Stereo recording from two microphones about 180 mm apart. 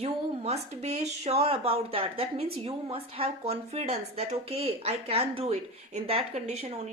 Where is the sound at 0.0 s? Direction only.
35° right (ahead or behind).